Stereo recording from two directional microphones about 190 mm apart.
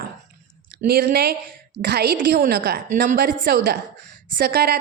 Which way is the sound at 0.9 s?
55° right (ahead or behind).